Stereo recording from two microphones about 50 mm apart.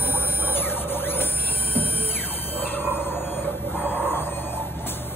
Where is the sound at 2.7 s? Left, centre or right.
Left.